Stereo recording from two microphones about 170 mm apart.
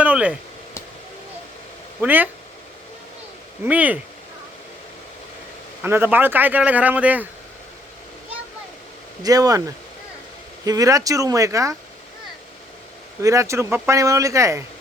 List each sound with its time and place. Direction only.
0.0 s speech: 10° right (ahead or behind)
2.0 s a man's voice: 10° right (ahead or behind)
3.6 s a man's voice: 10° right (ahead or behind)
5.8 s a man's voice: 10° right (ahead or behind)
9.2 s speech: 20° right (ahead or behind)
13.2 s a man's voice: 15° right (ahead or behind)